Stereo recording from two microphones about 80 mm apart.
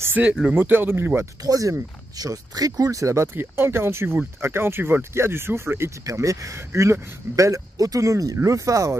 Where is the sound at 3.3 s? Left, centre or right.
Right.